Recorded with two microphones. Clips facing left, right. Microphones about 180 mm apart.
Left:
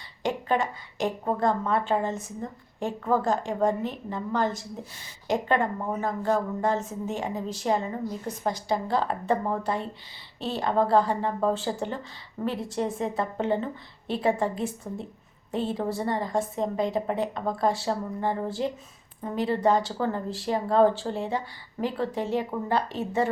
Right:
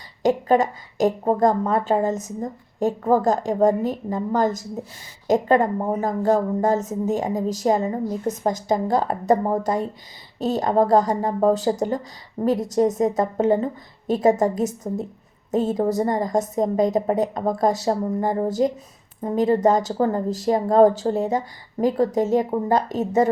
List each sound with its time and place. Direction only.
0.2 s a woman's voice: 40° right (ahead or behind)